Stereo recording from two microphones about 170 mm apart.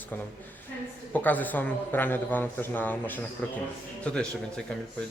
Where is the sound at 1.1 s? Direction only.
10° left (ahead or behind).